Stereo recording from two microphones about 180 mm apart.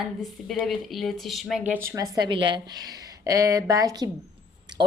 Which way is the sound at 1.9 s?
20° right (ahead or behind).